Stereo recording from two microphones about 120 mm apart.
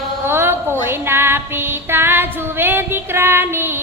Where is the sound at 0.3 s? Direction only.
20° right (ahead or behind).